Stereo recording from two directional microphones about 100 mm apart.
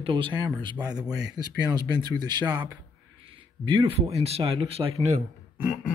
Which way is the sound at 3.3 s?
50° right (ahead or behind).